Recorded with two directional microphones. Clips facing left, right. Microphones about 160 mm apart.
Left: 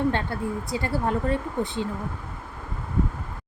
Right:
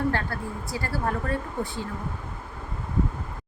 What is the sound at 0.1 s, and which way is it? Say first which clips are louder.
A woman's voice: left 3 dB; 20° left (ahead or behind).